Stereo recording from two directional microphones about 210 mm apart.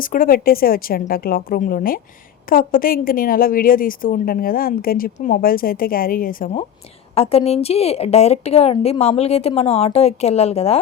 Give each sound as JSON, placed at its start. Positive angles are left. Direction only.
{"t": 0.0, "sound": "a woman's voice", "side_deg": 40}
{"t": 7.1, "sound": "a woman's voice", "side_deg": 25}